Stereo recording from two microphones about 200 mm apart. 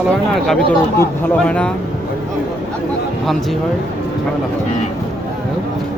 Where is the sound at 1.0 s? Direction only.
10° left (ahead or behind).